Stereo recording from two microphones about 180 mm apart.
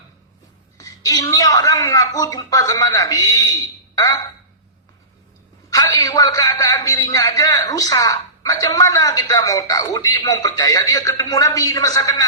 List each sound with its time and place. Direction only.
0.8 s a man's voice: 20° left (ahead or behind)
5.7 s a man's voice: 20° left (ahead or behind)